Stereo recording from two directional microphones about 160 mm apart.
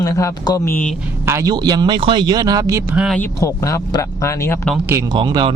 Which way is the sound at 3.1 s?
15° left (ahead or behind).